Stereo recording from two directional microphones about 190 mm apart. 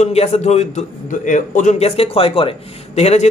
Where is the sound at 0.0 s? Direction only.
35° left (ahead or behind).